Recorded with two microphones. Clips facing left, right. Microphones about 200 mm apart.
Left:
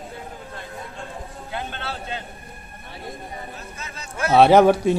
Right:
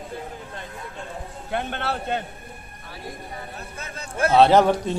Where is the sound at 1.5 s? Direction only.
55° right (ahead or behind).